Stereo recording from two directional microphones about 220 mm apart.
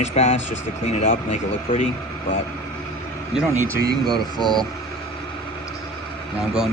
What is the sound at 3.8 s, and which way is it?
Speech, 45° right (ahead or behind).